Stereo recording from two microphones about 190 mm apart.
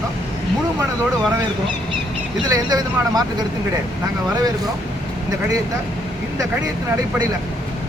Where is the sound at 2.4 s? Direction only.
20° right (ahead or behind).